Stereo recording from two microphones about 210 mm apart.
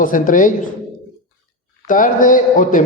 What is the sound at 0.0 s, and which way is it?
Speech, 40° left (ahead or behind).